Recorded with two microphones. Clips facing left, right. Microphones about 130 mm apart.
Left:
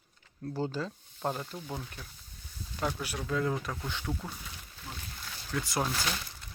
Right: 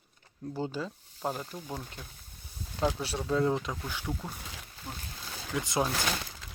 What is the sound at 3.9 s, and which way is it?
Speech, 5° right (ahead or behind).